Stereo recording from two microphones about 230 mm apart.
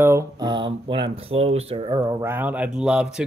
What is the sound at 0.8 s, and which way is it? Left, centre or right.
Speech, right.